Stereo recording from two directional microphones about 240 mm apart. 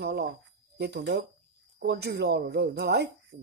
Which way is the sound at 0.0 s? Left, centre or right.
Right.